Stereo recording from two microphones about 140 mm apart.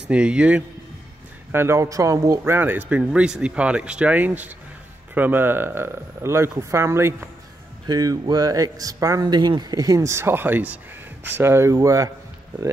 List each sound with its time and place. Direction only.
0.1 s speech: 10° right (ahead or behind)
1.5 s speech: 20° right (ahead or behind)